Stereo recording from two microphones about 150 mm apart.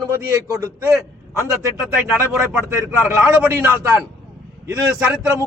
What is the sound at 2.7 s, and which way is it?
A man's voice, 15° right (ahead or behind).